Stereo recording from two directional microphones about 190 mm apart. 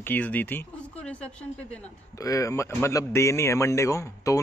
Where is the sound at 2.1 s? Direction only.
20° left (ahead or behind).